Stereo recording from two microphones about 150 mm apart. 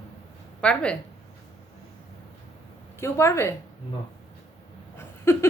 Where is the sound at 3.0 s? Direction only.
15° left (ahead or behind).